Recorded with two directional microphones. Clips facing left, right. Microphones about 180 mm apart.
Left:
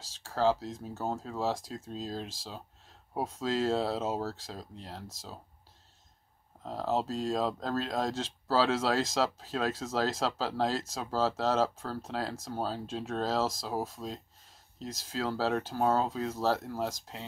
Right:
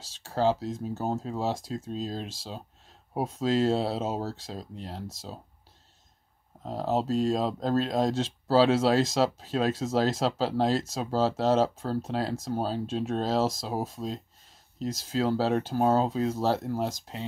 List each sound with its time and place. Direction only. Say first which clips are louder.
0.2 s speech: right 2 dB; 25° right (ahead or behind)
6.6 s speech: right 3 dB; 25° right (ahead or behind)